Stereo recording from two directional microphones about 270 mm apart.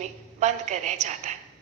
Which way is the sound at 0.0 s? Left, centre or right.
Right.